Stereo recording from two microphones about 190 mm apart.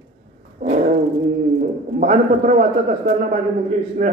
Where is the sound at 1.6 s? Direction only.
40° right (ahead or behind).